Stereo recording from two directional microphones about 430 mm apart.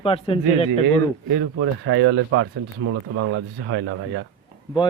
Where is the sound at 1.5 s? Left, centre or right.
Right.